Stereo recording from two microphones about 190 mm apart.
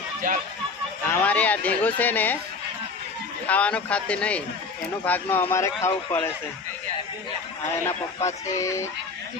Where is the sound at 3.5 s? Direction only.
5° left (ahead or behind).